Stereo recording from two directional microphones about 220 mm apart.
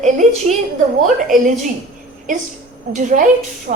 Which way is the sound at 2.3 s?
35° right (ahead or behind).